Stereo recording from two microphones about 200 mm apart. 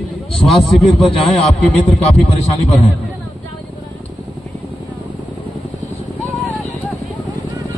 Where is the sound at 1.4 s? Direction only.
30° left (ahead or behind).